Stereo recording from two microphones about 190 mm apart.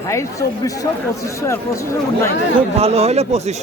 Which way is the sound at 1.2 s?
15° left (ahead or behind).